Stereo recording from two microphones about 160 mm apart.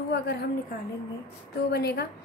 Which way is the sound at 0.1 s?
90° left.